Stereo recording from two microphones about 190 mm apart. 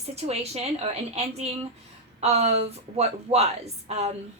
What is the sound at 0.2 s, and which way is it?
A woman's voice, 35° right (ahead or behind).